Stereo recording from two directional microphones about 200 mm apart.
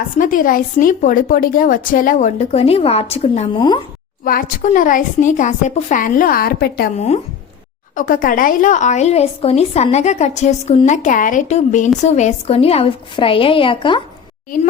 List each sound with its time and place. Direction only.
0.2 s a woman's voice: 40° left (ahead or behind)
3.6 s a woman's voice: 20° left (ahead or behind)
4.2 s a woman's voice: 45° left (ahead or behind)
6.9 s a woman's voice: 35° left (ahead or behind)